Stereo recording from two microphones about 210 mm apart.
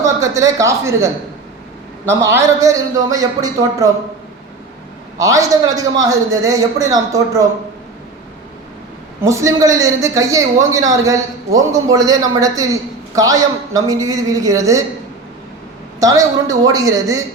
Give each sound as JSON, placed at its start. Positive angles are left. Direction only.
{"t": 0.0, "sound": "speech", "side_deg": -15}
{"t": 2.3, "sound": "a man's voice", "side_deg": -15}
{"t": 5.1, "sound": "a man's voice", "side_deg": -15}
{"t": 9.2, "sound": "a man's voice", "side_deg": -15}
{"t": 16.0, "sound": "a man's voice", "side_deg": -15}